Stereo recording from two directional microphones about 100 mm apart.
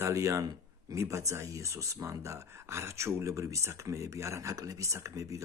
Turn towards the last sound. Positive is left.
turn(degrees=-35)  # may be behind; listen again after turning